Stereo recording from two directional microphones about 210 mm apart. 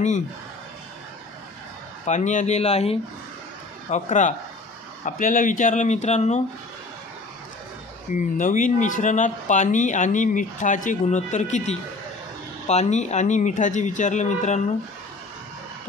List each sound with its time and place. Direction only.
2.0 s speech: 35° left (ahead or behind)
8.2 s speech: 40° left (ahead or behind)